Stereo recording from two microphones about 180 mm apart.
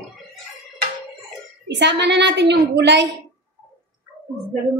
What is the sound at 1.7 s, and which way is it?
A woman's voice, 75° right (ahead or behind).